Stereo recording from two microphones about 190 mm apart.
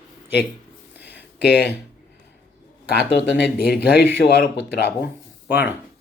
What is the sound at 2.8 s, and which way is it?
Speech, 55° left (ahead or behind).